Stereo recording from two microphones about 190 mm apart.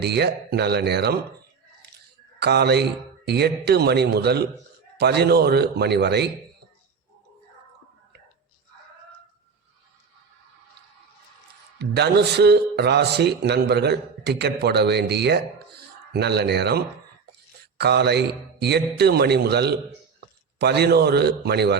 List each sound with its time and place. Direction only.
0.0 s a man's voice: 60° right (ahead or behind)
2.4 s a man's voice: 60° right (ahead or behind)
11.8 s a man's voice: 60° right (ahead or behind)